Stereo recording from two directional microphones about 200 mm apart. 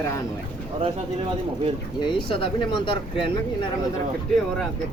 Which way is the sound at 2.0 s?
25° left (ahead or behind).